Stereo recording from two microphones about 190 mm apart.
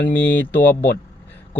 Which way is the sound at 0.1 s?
10° left (ahead or behind).